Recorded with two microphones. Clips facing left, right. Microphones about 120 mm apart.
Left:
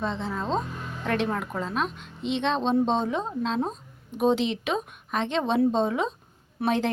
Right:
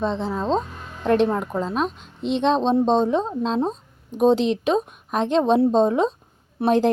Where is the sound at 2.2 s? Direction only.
Centre (ahead or behind).